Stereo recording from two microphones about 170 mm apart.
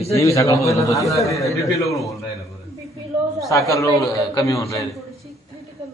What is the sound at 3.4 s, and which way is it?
A man's voice, 20° left (ahead or behind).